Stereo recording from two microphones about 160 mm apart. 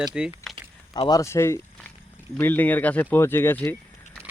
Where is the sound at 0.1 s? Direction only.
5° right (ahead or behind).